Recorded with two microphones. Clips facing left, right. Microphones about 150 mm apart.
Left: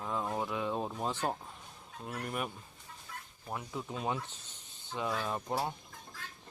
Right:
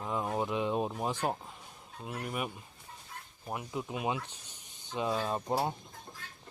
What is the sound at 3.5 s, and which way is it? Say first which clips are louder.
Speech: right 2 dB; 15° right (ahead or behind).